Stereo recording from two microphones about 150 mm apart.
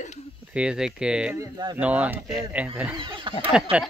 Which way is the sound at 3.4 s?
10° right (ahead or behind).